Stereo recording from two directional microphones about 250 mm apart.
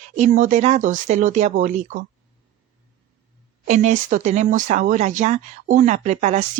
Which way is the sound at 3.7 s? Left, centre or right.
Right.